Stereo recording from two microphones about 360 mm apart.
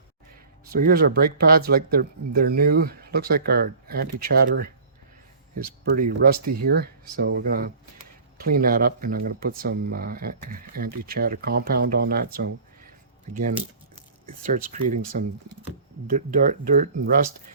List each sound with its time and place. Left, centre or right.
0.6 s speech: right
5.8 s speech: right
14.3 s speech: right
16.0 s speech: right